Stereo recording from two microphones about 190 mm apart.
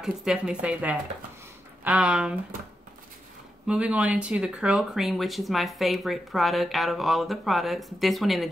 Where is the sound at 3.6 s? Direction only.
5° right (ahead or behind).